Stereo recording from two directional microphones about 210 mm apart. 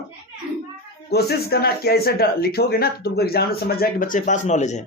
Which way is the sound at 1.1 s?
50° left (ahead or behind).